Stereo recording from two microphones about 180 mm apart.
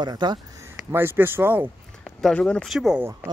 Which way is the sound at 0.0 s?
25° right (ahead or behind).